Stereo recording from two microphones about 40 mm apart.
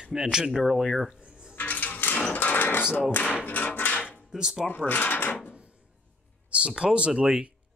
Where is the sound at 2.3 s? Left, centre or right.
Left.